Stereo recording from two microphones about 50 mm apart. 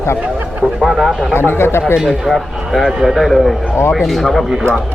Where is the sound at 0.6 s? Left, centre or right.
Centre.